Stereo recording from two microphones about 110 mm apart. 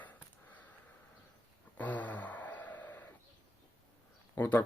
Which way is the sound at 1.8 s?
15° left (ahead or behind).